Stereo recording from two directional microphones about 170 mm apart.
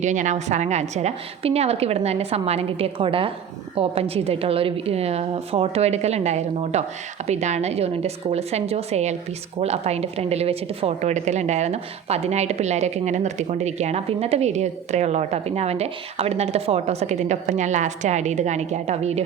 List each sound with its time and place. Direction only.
0.0 s a woman's voice: 45° right (ahead or behind)